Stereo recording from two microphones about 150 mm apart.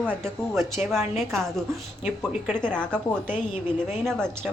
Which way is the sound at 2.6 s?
5° left (ahead or behind).